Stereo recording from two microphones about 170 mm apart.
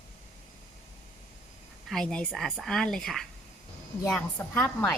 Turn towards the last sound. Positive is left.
turn(degrees=10)  # may be behind; listen again after turning